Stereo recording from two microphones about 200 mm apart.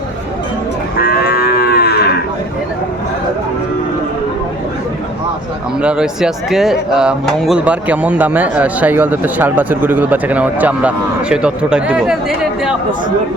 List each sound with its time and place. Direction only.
0.9 s moo: 50° left (ahead or behind)
5.7 s speech: 5° right (ahead or behind)